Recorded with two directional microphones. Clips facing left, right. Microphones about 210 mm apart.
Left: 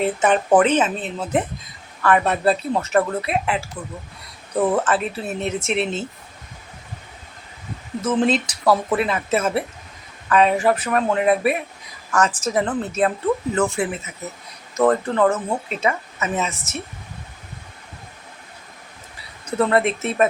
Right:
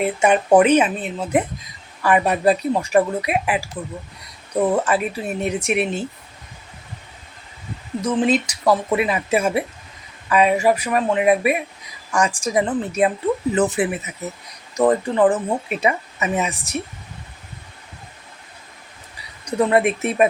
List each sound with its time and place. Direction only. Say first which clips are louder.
0.0 s a woman's voice: right 1 dB; 10° right (ahead or behind)
8.0 s a woman's voice: even; 10° right (ahead or behind)
19.5 s a woman's voice: right 1 dB; 15° right (ahead or behind)